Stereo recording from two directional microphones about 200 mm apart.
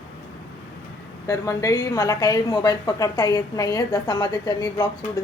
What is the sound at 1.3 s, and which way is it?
A woman's voice, 15° left (ahead or behind).